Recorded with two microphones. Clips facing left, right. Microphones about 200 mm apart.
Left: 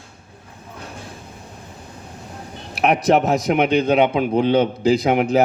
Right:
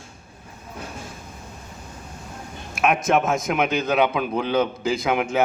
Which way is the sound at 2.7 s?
35° left (ahead or behind).